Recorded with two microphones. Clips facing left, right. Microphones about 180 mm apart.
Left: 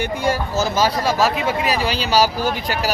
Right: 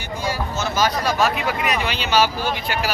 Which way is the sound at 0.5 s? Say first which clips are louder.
Left 3 dB; 35° left (ahead or behind).